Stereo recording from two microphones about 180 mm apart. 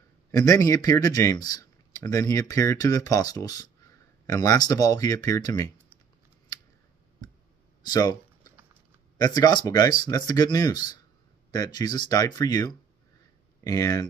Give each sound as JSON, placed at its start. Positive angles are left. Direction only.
{"t": 0.3, "sound": "speech", "side_deg": 20}
{"t": 7.8, "sound": "a sound", "side_deg": 20}
{"t": 9.2, "sound": "speech", "side_deg": 20}